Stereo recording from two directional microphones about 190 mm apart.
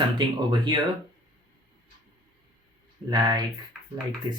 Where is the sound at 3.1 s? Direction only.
20° right (ahead or behind).